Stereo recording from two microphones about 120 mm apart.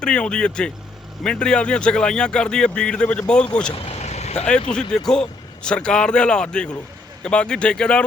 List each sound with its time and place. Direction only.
0.0 s speech: 10° left (ahead or behind)
3.8 s vehicle: 65° left (ahead or behind)
4.7 s speech: 5° left (ahead or behind)